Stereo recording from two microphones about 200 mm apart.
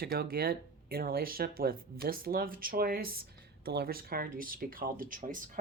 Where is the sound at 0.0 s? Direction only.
50° right (ahead or behind).